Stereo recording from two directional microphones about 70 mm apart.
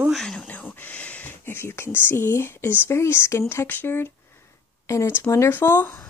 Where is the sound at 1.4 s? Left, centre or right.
Left.